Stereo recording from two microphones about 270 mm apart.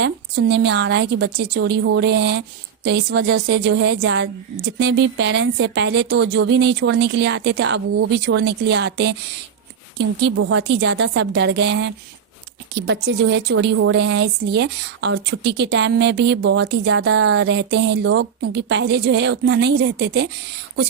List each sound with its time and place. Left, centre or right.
0.0 s a woman's voice: right